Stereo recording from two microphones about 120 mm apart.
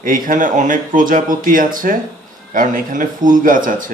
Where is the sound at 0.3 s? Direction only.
90° right.